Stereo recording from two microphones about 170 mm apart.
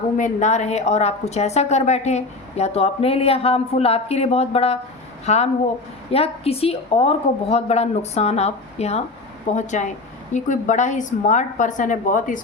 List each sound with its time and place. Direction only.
0.2 s a woman's voice: 45° left (ahead or behind)